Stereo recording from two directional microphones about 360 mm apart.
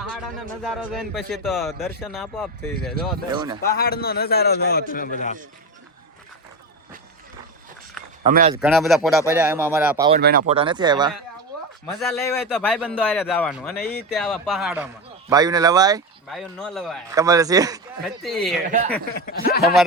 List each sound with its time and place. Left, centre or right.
0.6 s a man's voice: centre
3.3 s speech: centre
3.6 s a man's voice: left
8.2 s speech: centre
8.6 s a man's voice: centre
10.1 s speech: right
11.9 s a man's voice: centre
16.4 s speech: centre
18.0 s a man's voice: centre
19.1 s a man's voice: left